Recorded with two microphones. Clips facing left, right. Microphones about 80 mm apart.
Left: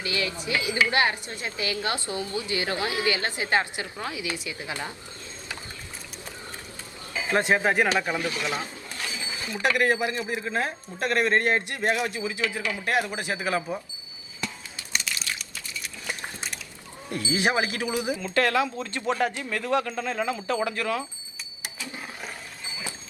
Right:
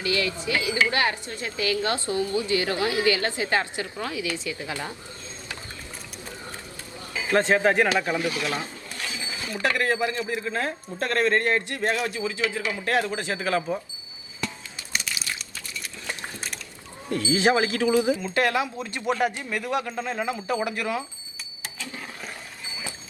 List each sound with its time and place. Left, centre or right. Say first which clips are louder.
0.0 s a man's voice: right 3 dB; left
7.1 s speech: right 2 dB; centre
8.2 s a man's voice: right 2 dB; centre
8.5 s stir: right 1 dB; left
9.6 s a man's voice: left 1 dB; left
14.4 s music: right 2 dB; centre
16.0 s a sound: even; centre
17.1 s a man's voice: right 4 dB; left
18.2 s speech: even; right
21.6 s a sound: right 1 dB; centre